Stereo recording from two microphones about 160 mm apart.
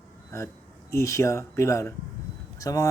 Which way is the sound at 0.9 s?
20° left (ahead or behind).